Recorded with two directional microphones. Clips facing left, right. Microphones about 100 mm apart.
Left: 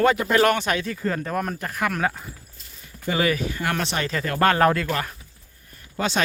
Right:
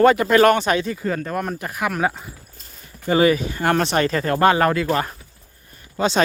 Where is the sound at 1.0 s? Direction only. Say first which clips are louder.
Right 2 dB; centre (ahead or behind).